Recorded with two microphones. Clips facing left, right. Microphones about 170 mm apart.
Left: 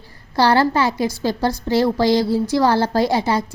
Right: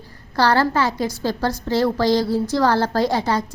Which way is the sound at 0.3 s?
10° left (ahead or behind).